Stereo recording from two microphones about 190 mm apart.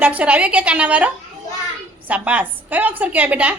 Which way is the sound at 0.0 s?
10° right (ahead or behind).